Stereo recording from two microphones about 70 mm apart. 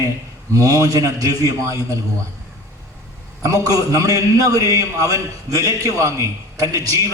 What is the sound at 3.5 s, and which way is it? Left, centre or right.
A man's voice, right.